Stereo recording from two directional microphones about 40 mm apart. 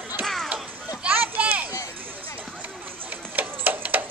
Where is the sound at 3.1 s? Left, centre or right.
Right.